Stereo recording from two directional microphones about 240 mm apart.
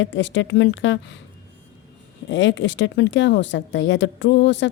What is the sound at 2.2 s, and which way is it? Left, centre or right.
Speech, left.